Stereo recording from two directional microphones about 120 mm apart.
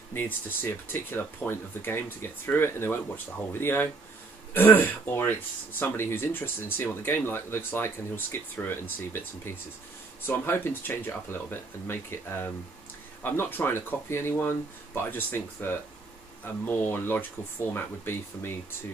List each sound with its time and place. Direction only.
0.1 s speech: 15° left (ahead or behind)